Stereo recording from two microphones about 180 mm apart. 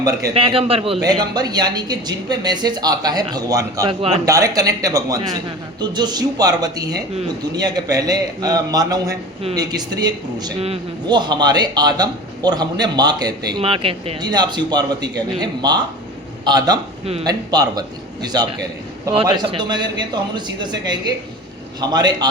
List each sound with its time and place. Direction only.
0.0 s speech: 20° right (ahead or behind)
19.5 s speech: 25° right (ahead or behind)